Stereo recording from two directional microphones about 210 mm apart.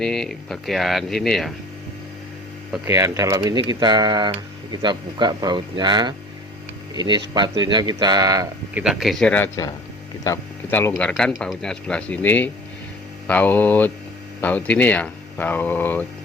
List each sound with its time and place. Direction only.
0.0 s speech: centre (ahead or behind)
2.8 s speech: 15° right (ahead or behind)
8.8 s speech: centre (ahead or behind)